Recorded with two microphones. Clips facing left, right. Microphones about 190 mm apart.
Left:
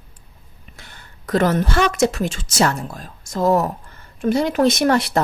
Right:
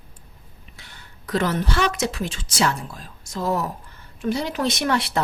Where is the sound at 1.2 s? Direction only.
50° left (ahead or behind).